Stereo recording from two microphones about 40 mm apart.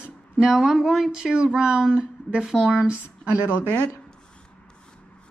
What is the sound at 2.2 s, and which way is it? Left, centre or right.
Speech, right.